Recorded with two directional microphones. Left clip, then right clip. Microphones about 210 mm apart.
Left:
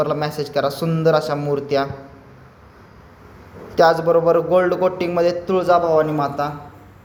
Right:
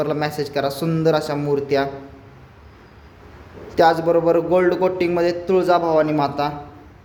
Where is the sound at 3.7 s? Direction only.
20° right (ahead or behind).